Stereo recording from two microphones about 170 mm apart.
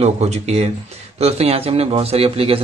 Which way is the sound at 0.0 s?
40° right (ahead or behind).